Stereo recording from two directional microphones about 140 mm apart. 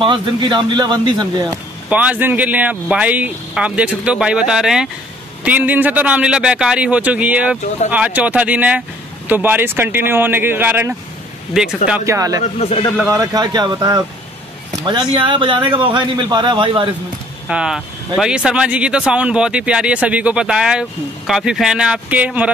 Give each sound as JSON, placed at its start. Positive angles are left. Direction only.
{"t": 0.0, "sound": "speech", "side_deg": -35}
{"t": 1.9, "sound": "speech", "side_deg": -10}
{"t": 11.5, "sound": "speech", "side_deg": -5}
{"t": 12.1, "sound": "speech", "side_deg": -25}
{"t": 12.4, "sound": "speech", "side_deg": 45}
{"t": 13.1, "sound": "speech", "side_deg": -25}
{"t": 17.5, "sound": "speech", "side_deg": -5}